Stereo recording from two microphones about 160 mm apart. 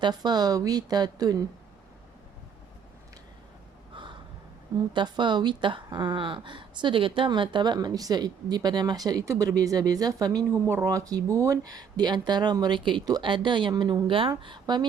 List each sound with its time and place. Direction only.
0.0 s speech: 25° right (ahead or behind)
4.9 s speech: 30° right (ahead or behind)